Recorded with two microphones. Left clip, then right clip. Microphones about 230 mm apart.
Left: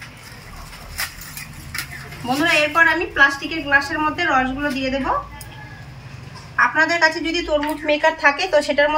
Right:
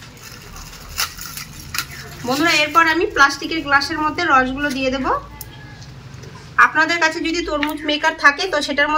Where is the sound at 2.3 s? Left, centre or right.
Centre.